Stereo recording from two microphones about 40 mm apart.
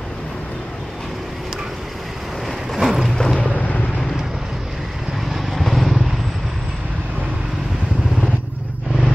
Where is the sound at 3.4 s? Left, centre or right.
Left.